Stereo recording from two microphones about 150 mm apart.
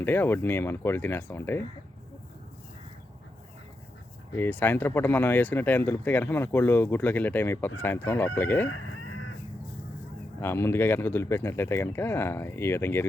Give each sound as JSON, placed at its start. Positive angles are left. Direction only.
{"t": 0.0, "sound": "speech", "side_deg": 15}
{"t": 4.4, "sound": "speech", "side_deg": 15}
{"t": 10.4, "sound": "speech", "side_deg": 15}